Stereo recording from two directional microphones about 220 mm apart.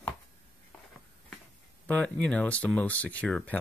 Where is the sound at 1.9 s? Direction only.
5° left (ahead or behind).